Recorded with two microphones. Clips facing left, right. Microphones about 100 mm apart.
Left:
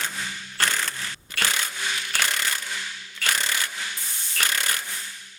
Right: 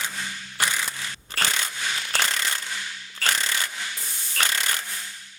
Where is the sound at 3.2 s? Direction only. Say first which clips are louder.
Right 1 dB; 35° right (ahead or behind).